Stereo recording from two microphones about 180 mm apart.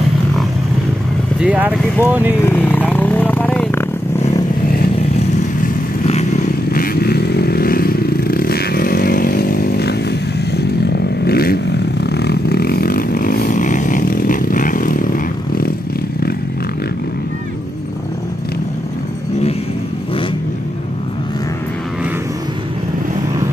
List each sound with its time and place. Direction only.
1.4 s speech: 5° right (ahead or behind)
2.4 s vehicle: 10° left (ahead or behind)
6.7 s motorcycle: 55° left (ahead or behind)
11.2 s vehicle: 60° left (ahead or behind)